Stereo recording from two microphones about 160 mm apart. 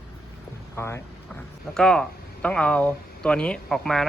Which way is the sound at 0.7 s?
15° left (ahead or behind).